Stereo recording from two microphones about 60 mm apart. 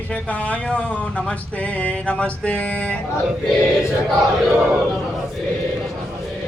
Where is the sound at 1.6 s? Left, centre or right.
Left.